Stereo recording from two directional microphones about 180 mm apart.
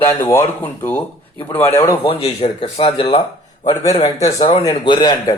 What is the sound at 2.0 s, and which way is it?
Speech, 35° left (ahead or behind).